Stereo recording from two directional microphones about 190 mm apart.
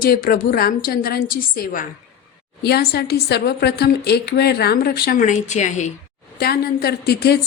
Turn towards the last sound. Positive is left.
turn(degrees=60)  # may be behind; listen again after turning